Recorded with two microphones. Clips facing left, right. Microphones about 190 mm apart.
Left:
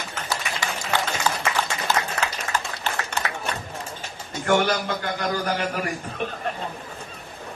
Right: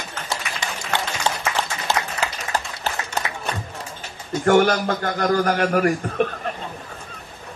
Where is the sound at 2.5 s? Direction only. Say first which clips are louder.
Right 3 dB; 35° right (ahead or behind).